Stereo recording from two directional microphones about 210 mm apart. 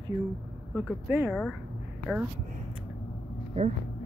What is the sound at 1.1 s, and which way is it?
Speech, 10° right (ahead or behind).